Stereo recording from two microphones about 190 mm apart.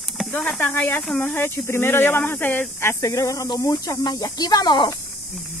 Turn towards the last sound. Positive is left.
turn(degrees=20)  # may be behind; listen again after turning